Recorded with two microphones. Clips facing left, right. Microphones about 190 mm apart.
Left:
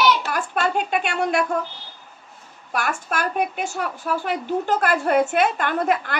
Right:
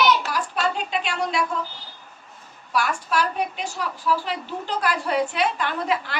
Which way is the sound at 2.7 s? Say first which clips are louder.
Right 1 dB; 50° left (ahead or behind).